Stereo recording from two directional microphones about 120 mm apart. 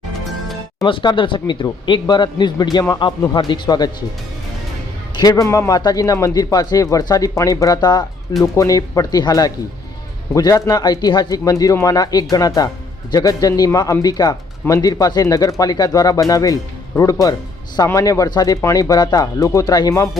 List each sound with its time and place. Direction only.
0.9 s speech: 45° left (ahead or behind)
5.2 s speech: 30° left (ahead or behind)